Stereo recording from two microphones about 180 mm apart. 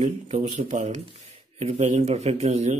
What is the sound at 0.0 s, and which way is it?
Speech, 40° right (ahead or behind).